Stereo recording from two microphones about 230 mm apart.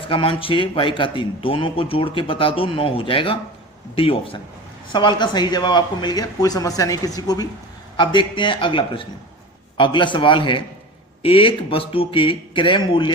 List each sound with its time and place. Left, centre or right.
0.0 s speech: left